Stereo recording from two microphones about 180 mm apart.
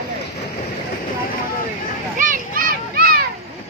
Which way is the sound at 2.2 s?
50° right (ahead or behind).